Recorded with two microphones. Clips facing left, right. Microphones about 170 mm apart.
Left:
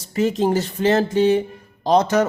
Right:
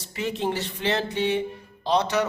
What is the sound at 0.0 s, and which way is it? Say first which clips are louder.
A man's voice: left 8 dB; 40° left (ahead or behind).